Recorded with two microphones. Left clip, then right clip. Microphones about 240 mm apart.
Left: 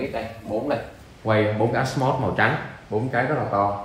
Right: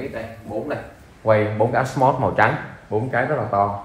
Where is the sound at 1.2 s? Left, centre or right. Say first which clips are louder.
Right 3 dB; right.